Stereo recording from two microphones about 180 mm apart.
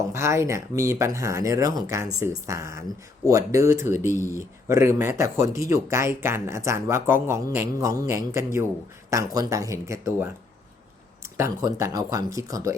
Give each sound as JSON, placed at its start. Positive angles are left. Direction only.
{"t": 0.1, "sound": "speech", "side_deg": -15}